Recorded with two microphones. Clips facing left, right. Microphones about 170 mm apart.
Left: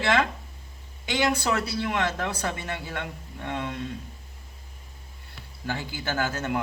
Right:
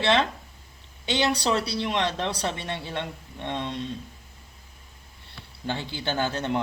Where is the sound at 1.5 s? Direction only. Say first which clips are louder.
Right 1 dB; 25° right (ahead or behind).